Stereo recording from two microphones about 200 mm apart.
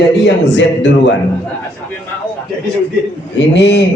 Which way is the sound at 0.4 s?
65° left (ahead or behind).